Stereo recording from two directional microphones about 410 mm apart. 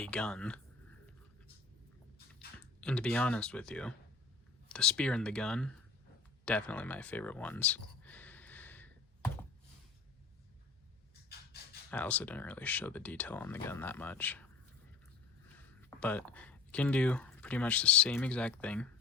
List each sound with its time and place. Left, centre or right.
0.0 s speech: centre
2.8 s speech: centre
6.4 s a sound: centre
11.3 s a sound: left
11.9 s speech: centre
16.0 s speech: centre